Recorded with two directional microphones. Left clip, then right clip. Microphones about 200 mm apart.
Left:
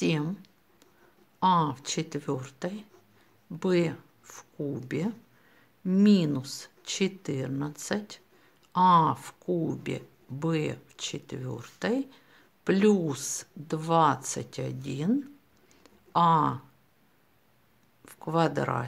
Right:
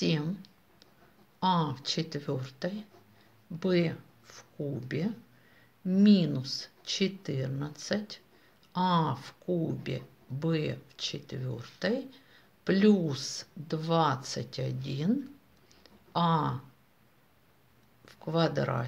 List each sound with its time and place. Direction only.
0.0 s speech: 30° left (ahead or behind)
15.8 s a sound: 30° left (ahead or behind)
18.0 s speech: 30° left (ahead or behind)